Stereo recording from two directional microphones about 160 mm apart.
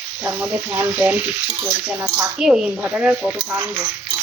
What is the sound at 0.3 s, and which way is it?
Speech, 10° right (ahead or behind).